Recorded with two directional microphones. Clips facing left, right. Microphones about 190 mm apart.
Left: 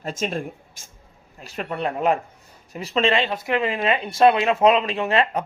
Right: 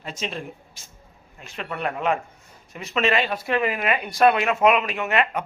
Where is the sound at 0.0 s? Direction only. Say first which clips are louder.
Left 5 dB; 45° left (ahead or behind).